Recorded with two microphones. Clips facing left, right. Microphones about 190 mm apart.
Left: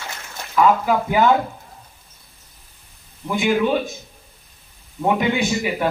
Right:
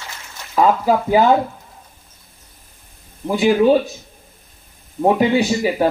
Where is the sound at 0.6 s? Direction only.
35° right (ahead or behind).